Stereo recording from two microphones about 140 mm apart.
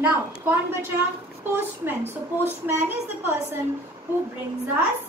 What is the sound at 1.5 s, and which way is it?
Speech, 15° right (ahead or behind).